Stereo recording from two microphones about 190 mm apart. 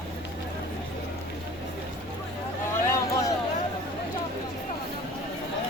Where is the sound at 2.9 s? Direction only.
15° left (ahead or behind).